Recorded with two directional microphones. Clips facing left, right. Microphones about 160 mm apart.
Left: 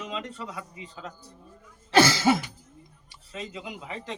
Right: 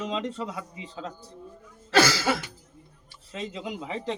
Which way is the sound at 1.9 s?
25° left (ahead or behind).